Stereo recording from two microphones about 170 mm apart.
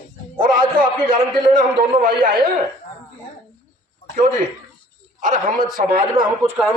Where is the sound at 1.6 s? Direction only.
50° right (ahead or behind).